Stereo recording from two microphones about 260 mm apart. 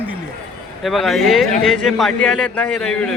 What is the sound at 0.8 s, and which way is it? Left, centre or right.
A man's voice, centre.